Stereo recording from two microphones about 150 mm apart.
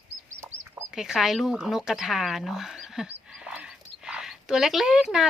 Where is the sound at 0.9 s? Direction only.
5° right (ahead or behind).